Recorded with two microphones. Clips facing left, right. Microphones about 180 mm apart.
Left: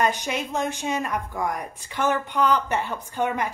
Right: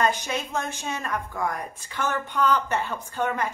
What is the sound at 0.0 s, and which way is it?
A woman's voice, 15° left (ahead or behind).